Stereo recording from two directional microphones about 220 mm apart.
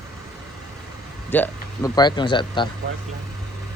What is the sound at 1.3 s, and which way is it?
Speech, 10° left (ahead or behind).